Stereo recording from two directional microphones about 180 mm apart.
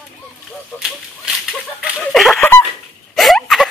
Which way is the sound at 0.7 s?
5° right (ahead or behind).